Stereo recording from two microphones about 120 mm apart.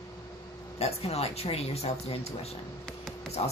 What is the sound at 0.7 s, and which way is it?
Speech, 60° left (ahead or behind).